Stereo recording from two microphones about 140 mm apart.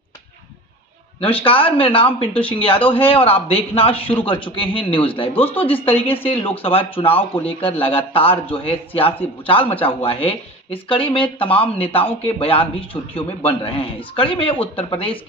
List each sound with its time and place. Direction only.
1.2 s a man's voice: 40° left (ahead or behind)
5.3 s speech: 15° left (ahead or behind)
5.6 s speech: 40° left (ahead or behind)